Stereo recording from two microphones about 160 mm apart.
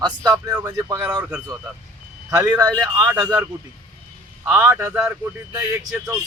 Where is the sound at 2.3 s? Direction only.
20° right (ahead or behind).